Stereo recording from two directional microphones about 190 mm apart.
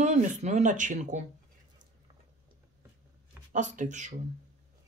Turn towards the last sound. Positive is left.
turn(degrees=-40)  # may be behind; listen again after turning